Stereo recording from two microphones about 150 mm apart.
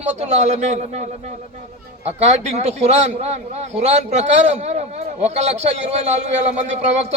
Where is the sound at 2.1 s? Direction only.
45° right (ahead or behind).